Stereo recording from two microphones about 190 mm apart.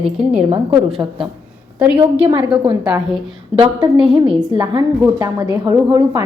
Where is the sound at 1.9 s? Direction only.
30° right (ahead or behind).